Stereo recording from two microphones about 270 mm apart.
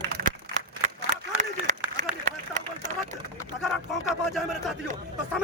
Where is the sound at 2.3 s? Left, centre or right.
Right.